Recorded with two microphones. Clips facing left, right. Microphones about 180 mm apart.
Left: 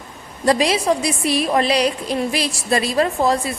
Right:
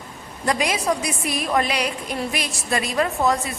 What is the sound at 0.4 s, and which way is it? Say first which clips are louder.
A woman's voice: left 5 dB; 30° left (ahead or behind).